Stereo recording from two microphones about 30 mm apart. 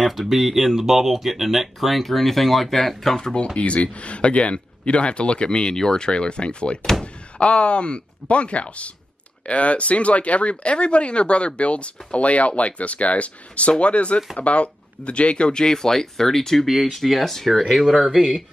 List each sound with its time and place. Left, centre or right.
0.0 s speech: centre
3.5 s speech: left
6.8 s door: centre
7.3 s speech: left; by 16.6 s centre
16.6 s speech: centre